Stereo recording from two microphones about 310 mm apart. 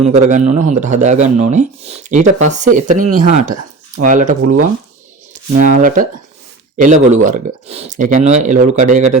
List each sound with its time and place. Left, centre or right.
0.1 s speech: right